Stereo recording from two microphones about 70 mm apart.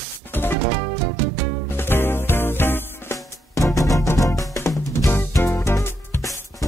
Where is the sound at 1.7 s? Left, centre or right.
Left.